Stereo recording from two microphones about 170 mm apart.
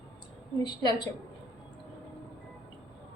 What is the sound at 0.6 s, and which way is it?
Speech, 25° left (ahead or behind).